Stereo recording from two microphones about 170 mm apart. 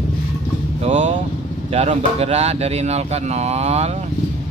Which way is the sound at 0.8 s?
45° right (ahead or behind).